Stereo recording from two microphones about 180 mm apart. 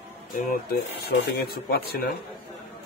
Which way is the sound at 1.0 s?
65° left (ahead or behind).